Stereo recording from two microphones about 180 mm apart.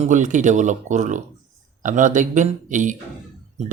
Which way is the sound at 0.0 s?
45° right (ahead or behind).